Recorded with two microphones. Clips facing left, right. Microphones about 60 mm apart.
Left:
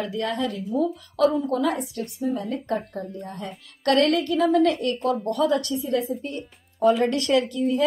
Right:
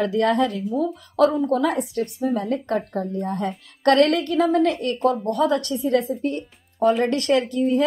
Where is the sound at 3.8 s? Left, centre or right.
Right.